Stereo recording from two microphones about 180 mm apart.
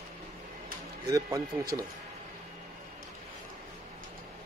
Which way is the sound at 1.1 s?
20° right (ahead or behind).